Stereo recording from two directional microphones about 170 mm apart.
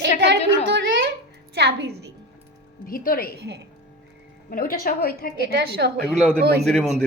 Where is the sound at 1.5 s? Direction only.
75° right (ahead or behind).